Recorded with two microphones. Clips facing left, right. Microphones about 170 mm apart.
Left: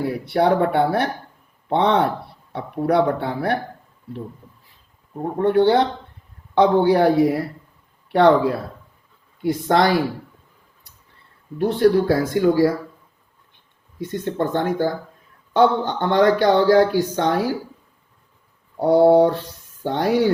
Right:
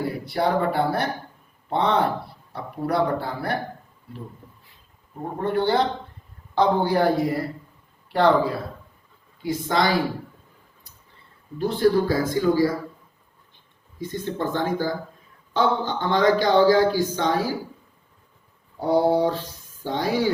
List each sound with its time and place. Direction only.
0.3 s speech: 65° left (ahead or behind)
5.4 s a man's voice: 70° left (ahead or behind)
8.1 s speech: 65° left (ahead or behind)
11.5 s speech: 65° left (ahead or behind)
14.0 s speech: 65° left (ahead or behind)
18.8 s speech: 60° left (ahead or behind)